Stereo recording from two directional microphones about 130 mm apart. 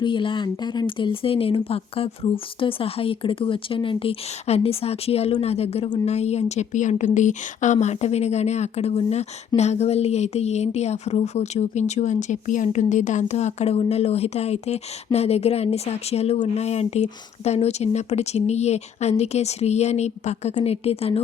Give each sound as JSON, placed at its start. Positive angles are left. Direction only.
{"t": 0.0, "sound": "speech", "side_deg": 40}